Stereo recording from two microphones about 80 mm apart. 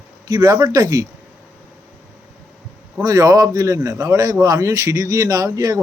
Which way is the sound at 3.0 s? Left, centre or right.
Right.